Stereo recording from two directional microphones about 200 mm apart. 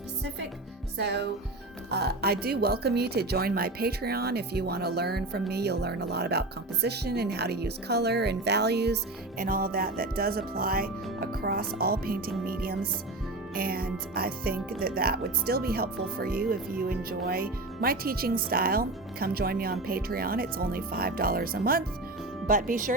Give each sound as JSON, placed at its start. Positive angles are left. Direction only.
{"t": 0.9, "sound": "speech", "side_deg": -60}
{"t": 9.4, "sound": "speech", "side_deg": -45}